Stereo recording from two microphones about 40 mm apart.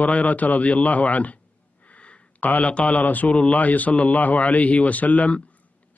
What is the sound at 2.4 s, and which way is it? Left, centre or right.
Speech, left.